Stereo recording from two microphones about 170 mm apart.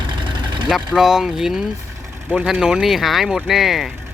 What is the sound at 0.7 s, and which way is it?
Speech, 5° right (ahead or behind).